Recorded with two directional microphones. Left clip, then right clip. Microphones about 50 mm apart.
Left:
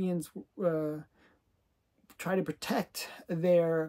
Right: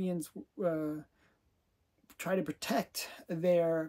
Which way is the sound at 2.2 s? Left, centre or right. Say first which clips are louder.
Left 2 dB; left.